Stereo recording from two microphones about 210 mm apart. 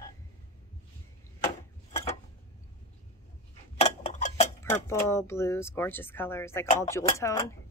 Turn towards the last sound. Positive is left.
turn(degrees=15)  # may be behind; listen again after turning